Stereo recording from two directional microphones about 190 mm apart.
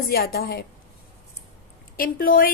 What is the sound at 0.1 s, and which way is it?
Speech, 55° left (ahead or behind).